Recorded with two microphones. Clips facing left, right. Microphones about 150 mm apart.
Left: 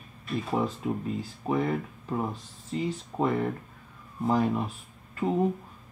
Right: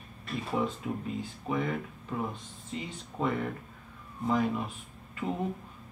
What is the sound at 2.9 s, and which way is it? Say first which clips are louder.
Speech: left 2 dB; 40° left (ahead or behind).